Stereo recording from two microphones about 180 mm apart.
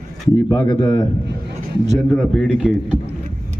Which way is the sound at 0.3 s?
15° left (ahead or behind).